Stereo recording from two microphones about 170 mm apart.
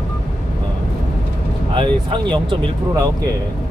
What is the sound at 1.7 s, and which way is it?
Speech, 30° right (ahead or behind).